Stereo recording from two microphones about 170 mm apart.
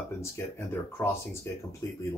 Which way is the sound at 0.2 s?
15° left (ahead or behind).